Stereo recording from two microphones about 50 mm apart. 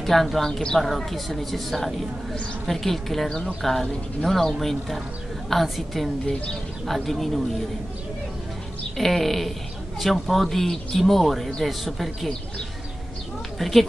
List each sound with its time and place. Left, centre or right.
0.0 s speech: centre
0.5 s speech: centre
0.7 s speech: centre
8.9 s speech: centre
13.6 s speech: centre